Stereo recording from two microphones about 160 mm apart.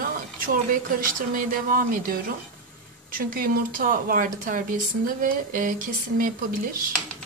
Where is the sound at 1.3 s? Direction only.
60° right (ahead or behind).